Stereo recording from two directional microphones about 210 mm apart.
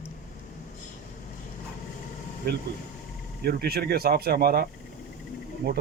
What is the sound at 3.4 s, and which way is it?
Speech, 45° right (ahead or behind).